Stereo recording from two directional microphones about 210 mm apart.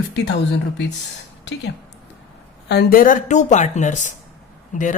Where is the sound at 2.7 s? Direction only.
45° left (ahead or behind).